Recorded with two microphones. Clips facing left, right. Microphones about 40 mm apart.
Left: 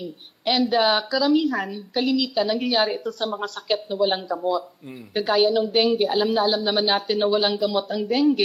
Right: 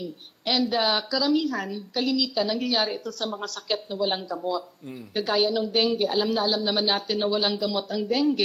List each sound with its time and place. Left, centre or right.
0.0 s a woman's voice: centre